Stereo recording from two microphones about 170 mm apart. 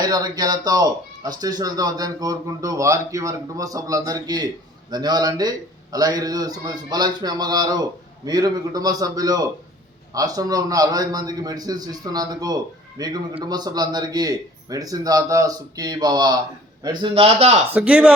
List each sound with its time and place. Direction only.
0.0 s a man's voice: 25° right (ahead or behind)
17.7 s speech: 5° right (ahead or behind)